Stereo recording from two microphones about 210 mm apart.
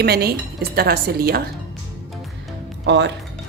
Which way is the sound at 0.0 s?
50° right (ahead or behind).